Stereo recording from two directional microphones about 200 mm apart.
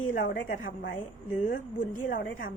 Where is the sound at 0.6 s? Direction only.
70° left (ahead or behind).